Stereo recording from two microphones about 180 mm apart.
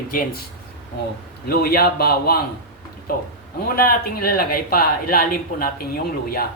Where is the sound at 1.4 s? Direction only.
60° left (ahead or behind).